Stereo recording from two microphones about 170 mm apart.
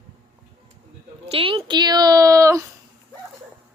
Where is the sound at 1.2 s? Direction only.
30° right (ahead or behind).